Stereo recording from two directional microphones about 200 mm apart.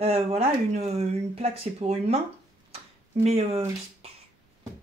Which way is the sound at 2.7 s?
30° right (ahead or behind).